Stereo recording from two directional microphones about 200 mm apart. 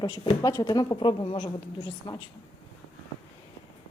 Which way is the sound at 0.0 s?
15° left (ahead or behind).